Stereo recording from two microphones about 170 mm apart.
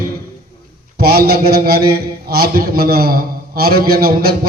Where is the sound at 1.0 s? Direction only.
65° right (ahead or behind).